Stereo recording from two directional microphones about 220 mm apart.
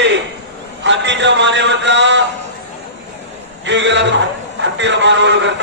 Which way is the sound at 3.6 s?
55° right (ahead or behind).